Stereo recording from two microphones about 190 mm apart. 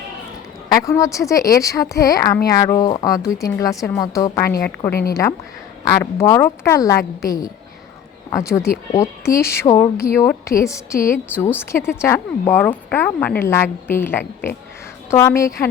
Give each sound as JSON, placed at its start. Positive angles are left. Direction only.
{"t": 0.7, "sound": "a woman's voice", "side_deg": 15}
{"t": 6.0, "sound": "a woman's voice", "side_deg": 15}